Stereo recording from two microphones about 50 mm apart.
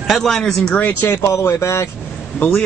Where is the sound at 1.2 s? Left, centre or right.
Left.